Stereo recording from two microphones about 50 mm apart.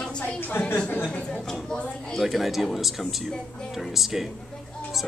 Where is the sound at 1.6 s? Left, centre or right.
Centre.